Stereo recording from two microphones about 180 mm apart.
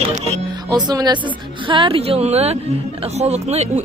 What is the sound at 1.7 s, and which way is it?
Speech, 30° right (ahead or behind).